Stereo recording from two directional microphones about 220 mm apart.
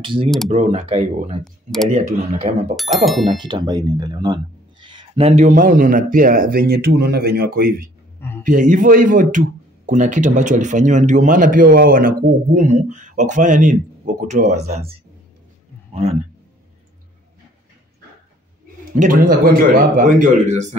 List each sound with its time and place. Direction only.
0.0 s speech: 20° right (ahead or behind)
1.4 s speech: centre (ahead or behind)
1.9 s speech: 30° right (ahead or behind)
2.7 s speech: centre (ahead or behind)
3.3 s speech: 20° right (ahead or behind); by 7.9 s 45° right (ahead or behind)
8.2 s a sound: 10° left (ahead or behind)
8.5 s a man's voice: 35° right (ahead or behind)
18.9 s speech: 40° right (ahead or behind)